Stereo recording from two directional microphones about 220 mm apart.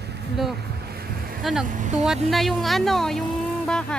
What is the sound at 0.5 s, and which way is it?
Waves, 45° right (ahead or behind).